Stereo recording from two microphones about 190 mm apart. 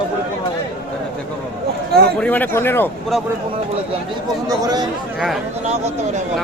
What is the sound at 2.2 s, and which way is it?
Speech, 10° left (ahead or behind).